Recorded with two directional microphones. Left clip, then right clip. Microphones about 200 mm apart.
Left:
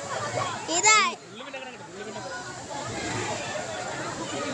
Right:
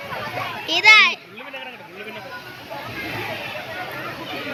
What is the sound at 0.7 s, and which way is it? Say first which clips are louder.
Speech: right 9 dB; 10° left (ahead or behind).